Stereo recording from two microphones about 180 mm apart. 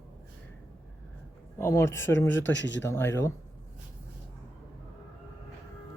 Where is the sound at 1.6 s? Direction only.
15° left (ahead or behind).